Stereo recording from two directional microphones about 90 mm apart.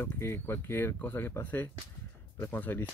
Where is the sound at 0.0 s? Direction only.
25° left (ahead or behind).